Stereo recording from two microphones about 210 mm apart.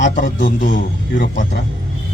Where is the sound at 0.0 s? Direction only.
35° left (ahead or behind).